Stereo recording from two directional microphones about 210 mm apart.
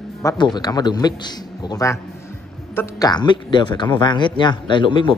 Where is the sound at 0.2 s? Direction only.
20° left (ahead or behind).